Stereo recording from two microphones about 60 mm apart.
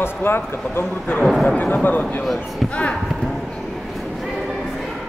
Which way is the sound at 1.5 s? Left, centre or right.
Left.